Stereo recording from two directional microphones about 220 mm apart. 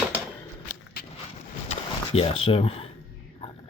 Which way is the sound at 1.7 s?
25° left (ahead or behind).